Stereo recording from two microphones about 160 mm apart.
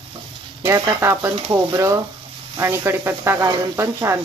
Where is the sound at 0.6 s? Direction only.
15° right (ahead or behind).